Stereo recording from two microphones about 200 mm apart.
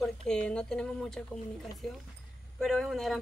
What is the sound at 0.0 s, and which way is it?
Speech, 5° left (ahead or behind).